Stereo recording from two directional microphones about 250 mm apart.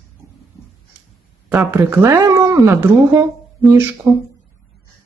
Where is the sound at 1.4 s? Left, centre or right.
Centre.